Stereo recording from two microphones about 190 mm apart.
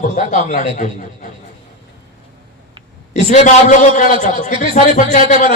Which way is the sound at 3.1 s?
40° left (ahead or behind).